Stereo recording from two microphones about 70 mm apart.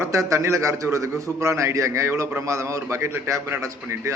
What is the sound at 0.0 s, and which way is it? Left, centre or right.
A man's voice, right.